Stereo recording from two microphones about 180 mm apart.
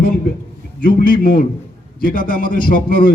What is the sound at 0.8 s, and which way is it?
A man's voice, 55° left (ahead or behind).